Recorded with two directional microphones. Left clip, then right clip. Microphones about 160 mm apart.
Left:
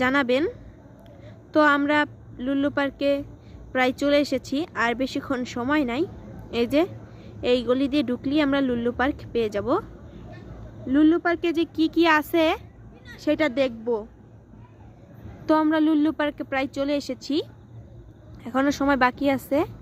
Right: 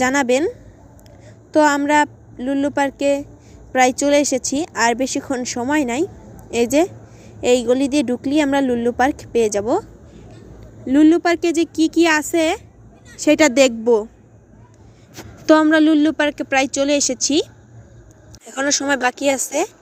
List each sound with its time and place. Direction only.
0.0 s a woman's voice: 10° right (ahead or behind)
1.5 s a woman's voice: 10° right (ahead or behind)
10.8 s a woman's voice: 20° right (ahead or behind)
13.1 s a woman's voice: 30° right (ahead or behind)
15.6 s a woman's voice: 15° right (ahead or behind)
18.4 s a woman's voice: 10° right (ahead or behind)